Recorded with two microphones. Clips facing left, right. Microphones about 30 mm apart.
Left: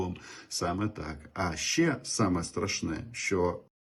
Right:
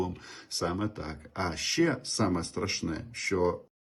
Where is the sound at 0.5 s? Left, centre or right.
Right.